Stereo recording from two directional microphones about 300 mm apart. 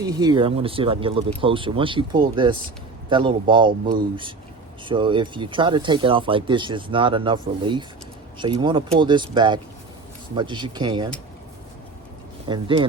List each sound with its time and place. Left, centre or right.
0.0 s speech: centre
4.9 s speech: centre
12.5 s speech: centre